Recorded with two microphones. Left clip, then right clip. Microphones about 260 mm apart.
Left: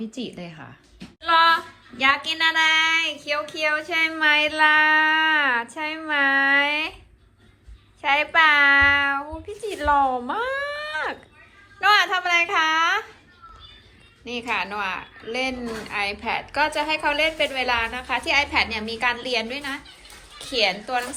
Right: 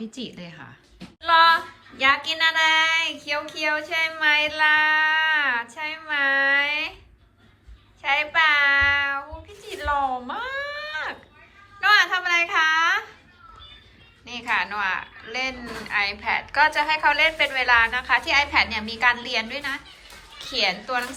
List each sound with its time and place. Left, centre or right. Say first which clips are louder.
0.0 s a woman's voice: left 2 dB; centre
8.0 s a woman's voice: left 2 dB; centre
14.3 s a woman's voice: right 1 dB; centre